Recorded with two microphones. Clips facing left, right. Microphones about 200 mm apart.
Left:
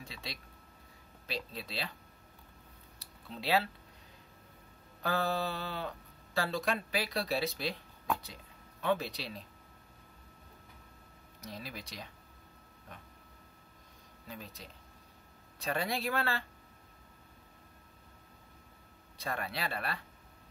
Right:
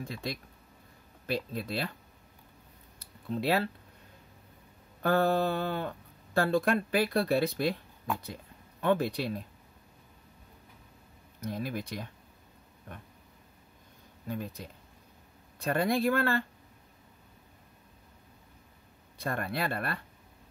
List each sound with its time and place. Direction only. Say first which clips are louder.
0.0 s speech: right 9 dB; 50° right (ahead or behind)
3.0 s a sound: right 11 dB; 50° right (ahead or behind)
5.0 s speech: right 7 dB; 50° right (ahead or behind)
8.8 s speech: right 6 dB; 55° right (ahead or behind)
11.4 s speech: right 10 dB; 55° right (ahead or behind)
14.2 s speech: right 10 dB; 50° right (ahead or behind)
19.1 s speech: right 5 dB; 50° right (ahead or behind)